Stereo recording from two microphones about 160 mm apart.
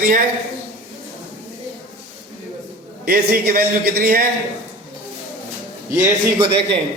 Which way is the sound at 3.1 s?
70° right (ahead or behind).